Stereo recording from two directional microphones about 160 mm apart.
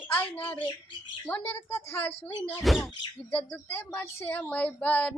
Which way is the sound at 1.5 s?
15° left (ahead or behind).